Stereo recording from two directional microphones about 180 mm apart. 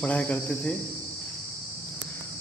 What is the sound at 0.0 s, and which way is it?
Speech, 10° left (ahead or behind).